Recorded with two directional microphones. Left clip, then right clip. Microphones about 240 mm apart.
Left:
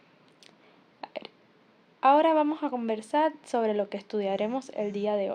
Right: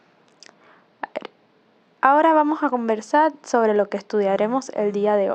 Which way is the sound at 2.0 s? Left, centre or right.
Right.